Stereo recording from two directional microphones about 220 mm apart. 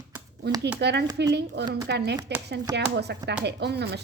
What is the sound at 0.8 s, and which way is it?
Speech, 50° right (ahead or behind).